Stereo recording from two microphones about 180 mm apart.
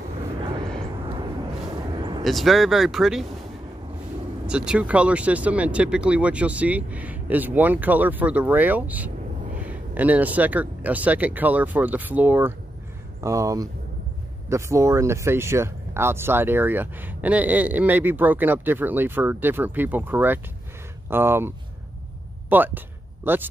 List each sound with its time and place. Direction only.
2.0 s vehicle: 25° right (ahead or behind)
2.2 s speech: centre (ahead or behind)
4.5 s speech: 5° right (ahead or behind)